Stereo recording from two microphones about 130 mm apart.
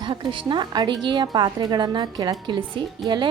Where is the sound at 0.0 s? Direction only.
40° right (ahead or behind).